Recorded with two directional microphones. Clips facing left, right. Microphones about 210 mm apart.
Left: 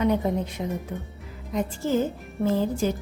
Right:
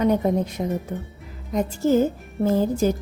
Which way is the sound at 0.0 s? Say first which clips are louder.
Right 3 dB; 40° right (ahead or behind).